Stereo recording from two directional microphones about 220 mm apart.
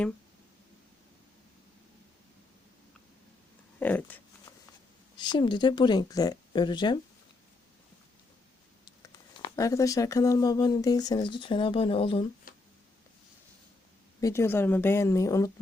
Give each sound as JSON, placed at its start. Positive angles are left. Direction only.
{"t": 3.8, "sound": "speech", "side_deg": 10}
{"t": 5.1, "sound": "speech", "side_deg": 20}
{"t": 9.4, "sound": "speech", "side_deg": 15}
{"t": 14.2, "sound": "speech", "side_deg": 15}